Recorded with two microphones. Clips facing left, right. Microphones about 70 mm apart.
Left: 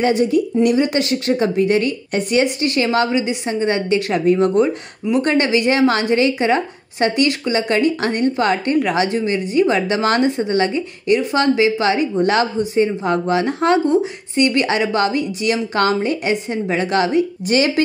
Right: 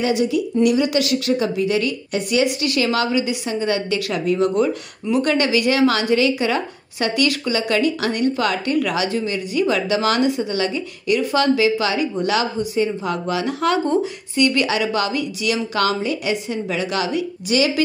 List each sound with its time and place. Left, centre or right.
0.0 s speech: left